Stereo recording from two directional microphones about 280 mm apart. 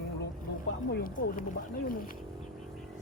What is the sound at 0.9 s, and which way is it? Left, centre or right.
Speech, left.